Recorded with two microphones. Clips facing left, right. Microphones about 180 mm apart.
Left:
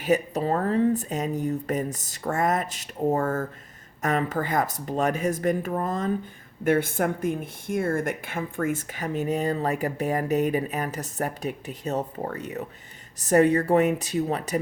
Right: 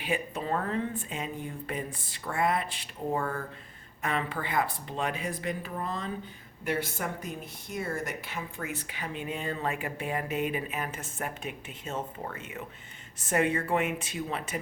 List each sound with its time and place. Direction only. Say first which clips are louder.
0.0 s speech: left 9 dB; 40° left (ahead or behind)